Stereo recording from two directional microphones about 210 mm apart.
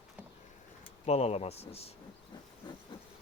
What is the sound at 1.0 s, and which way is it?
Speech, 30° left (ahead or behind).